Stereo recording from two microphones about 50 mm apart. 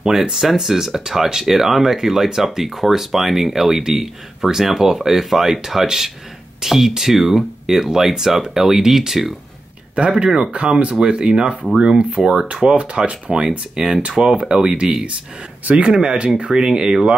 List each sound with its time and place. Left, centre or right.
0.0 s speech: centre
9.9 s speech: centre
15.9 s speech: centre